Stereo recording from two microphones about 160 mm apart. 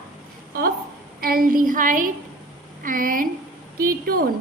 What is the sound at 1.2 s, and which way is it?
A woman's voice, 65° right (ahead or behind).